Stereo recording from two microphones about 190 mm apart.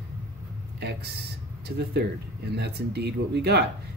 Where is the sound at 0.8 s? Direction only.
60° right (ahead or behind).